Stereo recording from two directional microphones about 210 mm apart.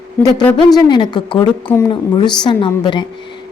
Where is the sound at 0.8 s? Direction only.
20° left (ahead or behind).